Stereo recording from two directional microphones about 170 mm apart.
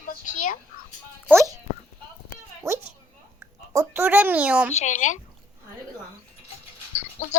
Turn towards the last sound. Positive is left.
turn(degrees=45)  # may be behind; listen again after turning